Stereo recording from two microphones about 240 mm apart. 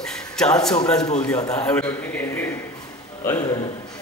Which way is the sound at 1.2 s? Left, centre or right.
Centre.